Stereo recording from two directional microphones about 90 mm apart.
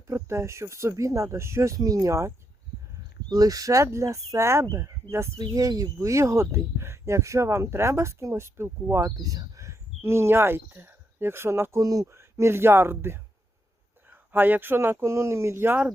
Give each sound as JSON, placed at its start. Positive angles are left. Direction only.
{"t": 0.1, "sound": "speech", "side_deg": -30}
{"t": 5.4, "sound": "speech", "side_deg": -40}
{"t": 9.0, "sound": "speech", "side_deg": -40}
{"t": 11.8, "sound": "speech", "side_deg": -45}
{"t": 12.1, "sound": "speech", "side_deg": -30}